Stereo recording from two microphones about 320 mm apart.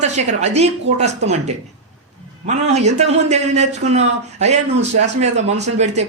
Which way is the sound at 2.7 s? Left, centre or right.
Right.